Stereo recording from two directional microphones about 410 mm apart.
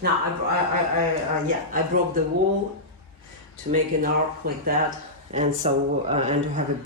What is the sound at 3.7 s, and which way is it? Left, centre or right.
Speech, right.